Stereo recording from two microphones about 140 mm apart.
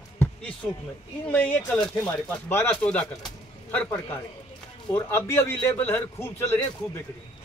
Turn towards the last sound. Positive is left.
turn(degrees=15)  # may be behind; listen again after turning